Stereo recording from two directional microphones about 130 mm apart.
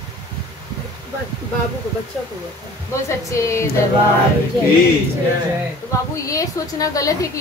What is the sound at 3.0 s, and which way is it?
Speech, 20° left (ahead or behind).